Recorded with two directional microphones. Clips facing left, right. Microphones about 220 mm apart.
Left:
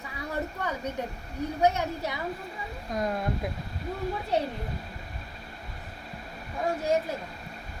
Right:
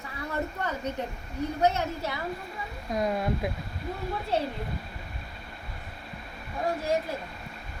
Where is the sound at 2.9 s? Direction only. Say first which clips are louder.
Right 2 dB; 5° right (ahead or behind).